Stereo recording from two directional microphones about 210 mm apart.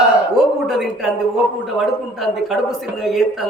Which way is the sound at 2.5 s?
Centre (ahead or behind).